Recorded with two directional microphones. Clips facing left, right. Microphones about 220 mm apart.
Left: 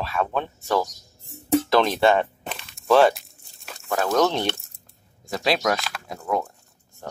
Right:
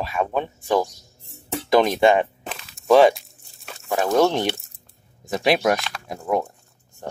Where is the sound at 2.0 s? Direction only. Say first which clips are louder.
Right 2 dB; 15° right (ahead or behind).